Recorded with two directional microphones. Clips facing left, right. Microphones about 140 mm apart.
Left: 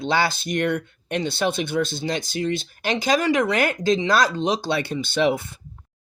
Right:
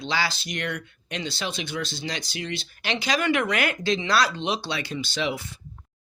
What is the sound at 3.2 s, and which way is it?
Speech, 35° left (ahead or behind).